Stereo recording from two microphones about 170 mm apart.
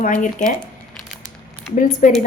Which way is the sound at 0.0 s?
50° left (ahead or behind).